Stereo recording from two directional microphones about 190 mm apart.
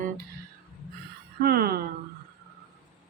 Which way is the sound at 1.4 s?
55° right (ahead or behind).